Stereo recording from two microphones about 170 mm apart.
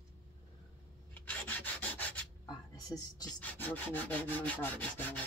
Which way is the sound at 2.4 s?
25° left (ahead or behind).